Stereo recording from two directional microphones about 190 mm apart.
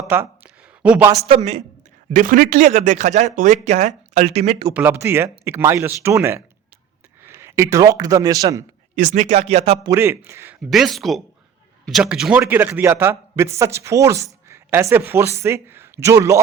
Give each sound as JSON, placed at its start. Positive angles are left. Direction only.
{"t": 0.1, "sound": "a sound", "side_deg": -10}
{"t": 1.2, "sound": "speech", "side_deg": -30}
{"t": 2.1, "sound": "speech", "side_deg": -45}
{"t": 4.7, "sound": "a man's voice", "side_deg": -10}
{"t": 9.0, "sound": "speech", "side_deg": -35}
{"t": 9.8, "sound": "a man's voice", "side_deg": -15}
{"t": 10.7, "sound": "a man's voice", "side_deg": 0}